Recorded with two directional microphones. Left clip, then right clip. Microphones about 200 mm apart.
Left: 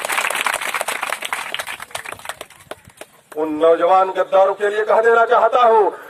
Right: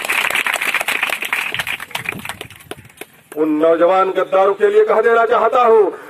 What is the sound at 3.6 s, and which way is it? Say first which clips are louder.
Speech: even; 40° left (ahead or behind).